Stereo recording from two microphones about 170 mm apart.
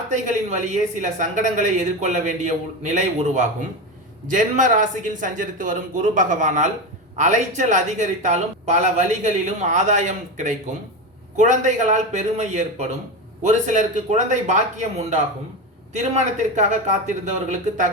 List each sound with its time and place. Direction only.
0.1 s speech: 45° right (ahead or behind)